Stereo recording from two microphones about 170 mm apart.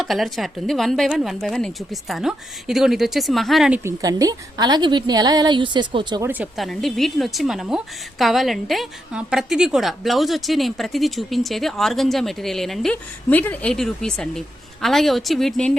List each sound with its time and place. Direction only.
0.0 s a woman's voice: centre (ahead or behind)
3.8 s a woman's voice: 20° right (ahead or behind)
6.2 s a woman's voice: 10° right (ahead or behind)